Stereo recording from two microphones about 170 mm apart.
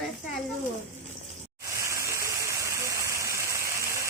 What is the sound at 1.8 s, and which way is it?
Gush, 20° right (ahead or behind).